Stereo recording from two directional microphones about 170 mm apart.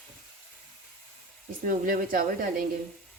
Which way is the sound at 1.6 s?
55° right (ahead or behind).